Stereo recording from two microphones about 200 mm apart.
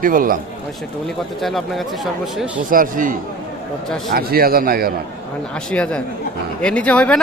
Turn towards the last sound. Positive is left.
turn(degrees=5)  # may be behind; listen again after turning